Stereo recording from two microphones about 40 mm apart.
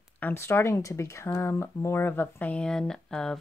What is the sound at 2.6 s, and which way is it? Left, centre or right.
Speech, centre.